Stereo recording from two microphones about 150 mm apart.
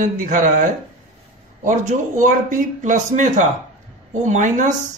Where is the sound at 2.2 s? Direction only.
60° right (ahead or behind).